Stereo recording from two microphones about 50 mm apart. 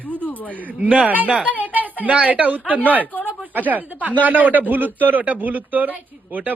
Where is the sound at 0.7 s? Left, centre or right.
Right.